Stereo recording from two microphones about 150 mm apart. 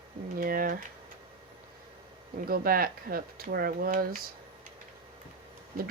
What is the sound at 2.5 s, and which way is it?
Speech, 80° right.